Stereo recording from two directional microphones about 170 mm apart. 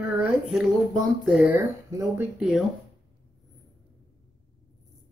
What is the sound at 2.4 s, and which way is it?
Speech, centre (ahead or behind).